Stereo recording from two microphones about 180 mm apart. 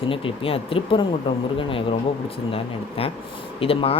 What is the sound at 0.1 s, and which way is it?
Speech, 30° left (ahead or behind).